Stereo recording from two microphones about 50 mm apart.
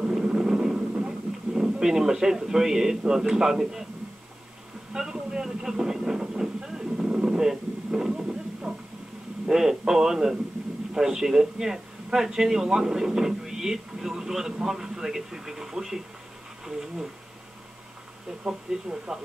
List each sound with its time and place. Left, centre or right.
0.0 s vehicle: centre
0.4 s a sound: centre
3.0 s speech: centre
4.9 s vehicle: centre
9.5 s speech: centre
18.4 s speech: centre